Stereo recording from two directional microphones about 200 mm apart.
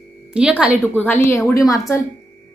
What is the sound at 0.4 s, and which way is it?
Speech, 5° right (ahead or behind).